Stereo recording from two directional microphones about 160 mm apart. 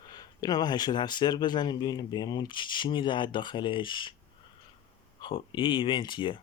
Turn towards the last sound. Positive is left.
turn(degrees=30)  # may be behind; listen again after turning